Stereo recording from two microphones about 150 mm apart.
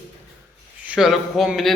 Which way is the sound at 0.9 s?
Centre (ahead or behind).